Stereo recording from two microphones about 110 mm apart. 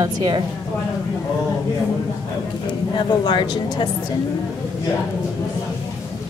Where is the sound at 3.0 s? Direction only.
45° left (ahead or behind).